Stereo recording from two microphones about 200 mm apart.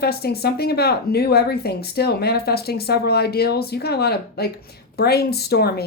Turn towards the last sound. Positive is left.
turn(degrees=55)  # may be behind; listen again after turning